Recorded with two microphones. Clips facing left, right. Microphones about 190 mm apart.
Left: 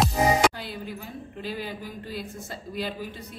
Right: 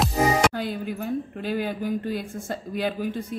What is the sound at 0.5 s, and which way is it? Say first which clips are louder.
A woman's voice: right 7 dB; 50° right (ahead or behind).